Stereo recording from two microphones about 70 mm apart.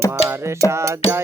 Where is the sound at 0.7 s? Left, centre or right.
Right.